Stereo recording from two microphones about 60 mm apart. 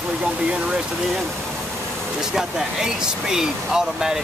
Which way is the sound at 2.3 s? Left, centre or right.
Centre.